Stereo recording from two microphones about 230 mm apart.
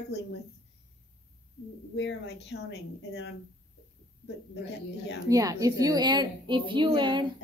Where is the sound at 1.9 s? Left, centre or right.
Left.